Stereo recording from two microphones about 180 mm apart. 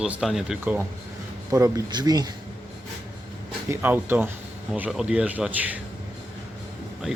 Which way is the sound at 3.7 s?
10° right (ahead or behind).